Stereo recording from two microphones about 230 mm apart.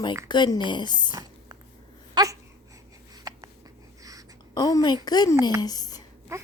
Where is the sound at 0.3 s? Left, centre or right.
Centre.